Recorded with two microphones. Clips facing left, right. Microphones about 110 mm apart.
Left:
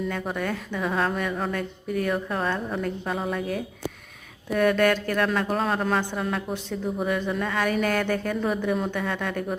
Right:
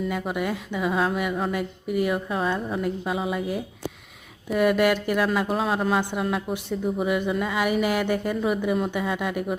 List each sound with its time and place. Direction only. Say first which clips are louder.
0.1 s speech: right 2 dB; 10° right (ahead or behind)
6.0 s speech: right 2 dB; 15° right (ahead or behind)